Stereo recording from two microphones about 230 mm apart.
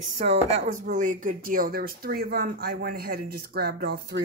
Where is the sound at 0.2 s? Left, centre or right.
Right.